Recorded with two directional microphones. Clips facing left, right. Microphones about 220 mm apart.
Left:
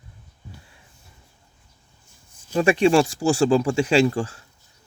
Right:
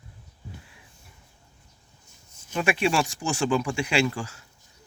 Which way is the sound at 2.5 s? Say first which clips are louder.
Left 7 dB; 35° left (ahead or behind).